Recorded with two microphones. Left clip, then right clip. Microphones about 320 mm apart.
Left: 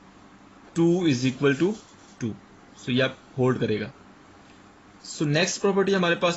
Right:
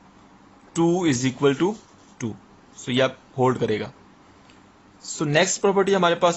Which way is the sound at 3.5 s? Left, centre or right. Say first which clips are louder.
Right 1 dB; right.